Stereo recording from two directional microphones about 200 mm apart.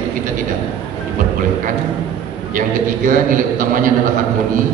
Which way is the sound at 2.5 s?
40° right (ahead or behind).